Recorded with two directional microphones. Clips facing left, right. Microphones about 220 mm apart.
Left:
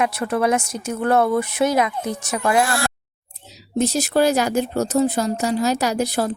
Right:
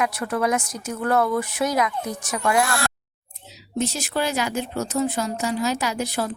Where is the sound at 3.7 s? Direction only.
40° left (ahead or behind).